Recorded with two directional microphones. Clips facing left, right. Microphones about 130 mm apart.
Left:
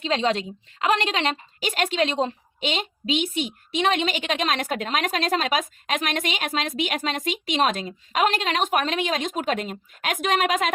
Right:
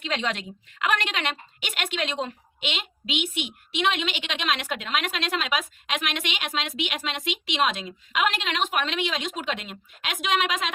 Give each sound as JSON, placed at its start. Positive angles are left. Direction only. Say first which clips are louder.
{"t": 0.0, "sound": "a woman's voice", "louder": "left 6 dB", "side_deg": 30}